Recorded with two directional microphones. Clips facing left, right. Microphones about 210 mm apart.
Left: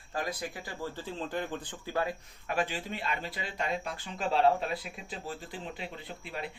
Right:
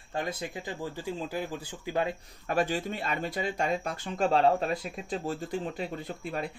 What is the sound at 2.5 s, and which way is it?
Speech, 40° right (ahead or behind).